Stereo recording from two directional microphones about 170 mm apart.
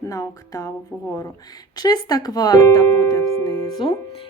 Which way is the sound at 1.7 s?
20° left (ahead or behind).